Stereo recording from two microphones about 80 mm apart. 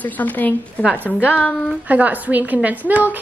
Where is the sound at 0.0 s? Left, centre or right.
Left.